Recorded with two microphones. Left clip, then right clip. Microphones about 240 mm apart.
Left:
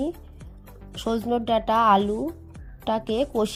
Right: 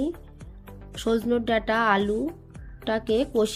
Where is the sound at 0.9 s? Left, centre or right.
Left.